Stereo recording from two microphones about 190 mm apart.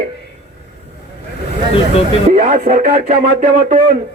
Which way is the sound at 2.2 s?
40° right (ahead or behind).